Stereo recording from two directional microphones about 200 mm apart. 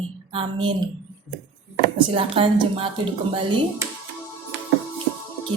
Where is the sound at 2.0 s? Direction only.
25° right (ahead or behind).